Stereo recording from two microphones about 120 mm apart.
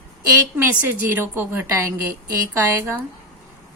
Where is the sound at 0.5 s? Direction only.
15° right (ahead or behind).